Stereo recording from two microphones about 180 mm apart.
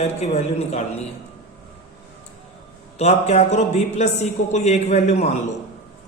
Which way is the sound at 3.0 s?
40° left (ahead or behind).